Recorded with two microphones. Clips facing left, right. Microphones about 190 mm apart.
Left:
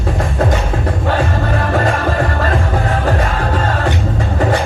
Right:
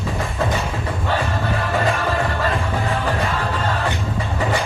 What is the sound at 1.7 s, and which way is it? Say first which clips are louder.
Music: left 3 dB; 50° left (ahead or behind).